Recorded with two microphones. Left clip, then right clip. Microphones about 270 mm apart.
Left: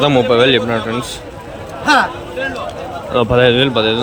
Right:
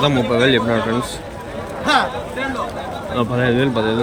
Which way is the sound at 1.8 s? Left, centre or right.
Left.